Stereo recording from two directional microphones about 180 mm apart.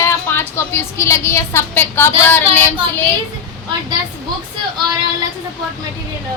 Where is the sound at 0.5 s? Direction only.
15° left (ahead or behind).